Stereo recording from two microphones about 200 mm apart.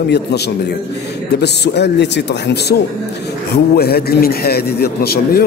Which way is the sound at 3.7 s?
50° left (ahead or behind).